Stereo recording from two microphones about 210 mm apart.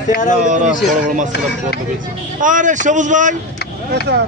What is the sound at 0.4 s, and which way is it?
Speech, 35° right (ahead or behind).